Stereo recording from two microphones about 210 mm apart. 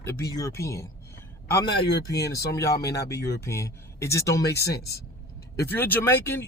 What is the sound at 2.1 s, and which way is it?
Speech, 50° left (ahead or behind).